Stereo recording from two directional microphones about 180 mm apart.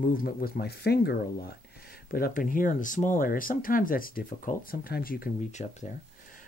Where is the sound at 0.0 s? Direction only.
50° left (ahead or behind).